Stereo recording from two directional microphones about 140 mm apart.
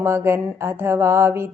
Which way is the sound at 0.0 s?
15° right (ahead or behind).